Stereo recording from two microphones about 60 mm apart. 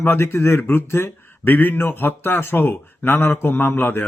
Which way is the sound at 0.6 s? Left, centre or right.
Left.